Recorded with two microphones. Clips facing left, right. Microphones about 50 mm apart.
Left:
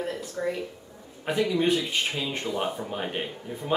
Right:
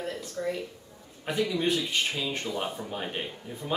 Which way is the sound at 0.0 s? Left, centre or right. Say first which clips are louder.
Left 3 dB; centre.